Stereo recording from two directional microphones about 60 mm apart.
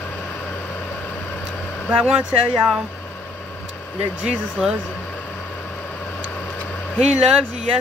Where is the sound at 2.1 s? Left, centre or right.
Centre.